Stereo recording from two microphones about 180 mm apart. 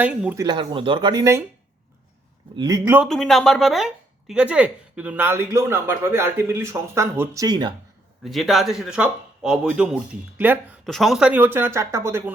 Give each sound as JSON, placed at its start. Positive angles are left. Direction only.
{"t": 0.0, "sound": "speech", "side_deg": -10}
{"t": 0.3, "sound": "speech", "side_deg": -25}
{"t": 2.6, "sound": "speech", "side_deg": -20}
{"t": 3.1, "sound": "speech", "side_deg": 0}
{"t": 8.2, "sound": "a man's voice", "side_deg": 0}
{"t": 10.8, "sound": "speech", "side_deg": 0}